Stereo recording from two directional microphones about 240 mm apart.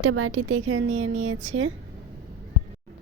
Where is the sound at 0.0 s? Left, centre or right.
Right.